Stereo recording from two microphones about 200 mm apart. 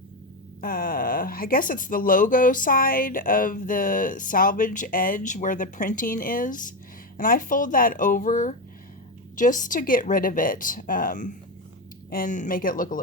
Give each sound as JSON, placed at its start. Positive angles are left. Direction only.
{"t": 0.6, "sound": "speech", "side_deg": 45}